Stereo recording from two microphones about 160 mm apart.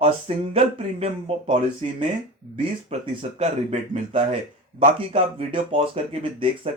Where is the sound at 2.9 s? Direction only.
40° right (ahead or behind).